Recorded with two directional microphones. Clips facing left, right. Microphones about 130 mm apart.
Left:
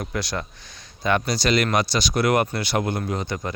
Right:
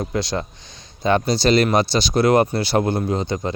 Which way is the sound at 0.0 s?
25° right (ahead or behind).